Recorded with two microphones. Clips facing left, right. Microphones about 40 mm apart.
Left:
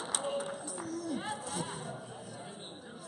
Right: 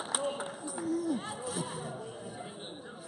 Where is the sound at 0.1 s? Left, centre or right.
Centre.